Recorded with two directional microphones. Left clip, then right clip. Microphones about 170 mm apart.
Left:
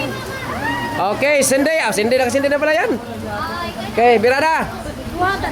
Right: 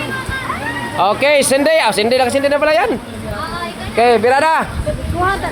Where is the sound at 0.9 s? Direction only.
Centre (ahead or behind).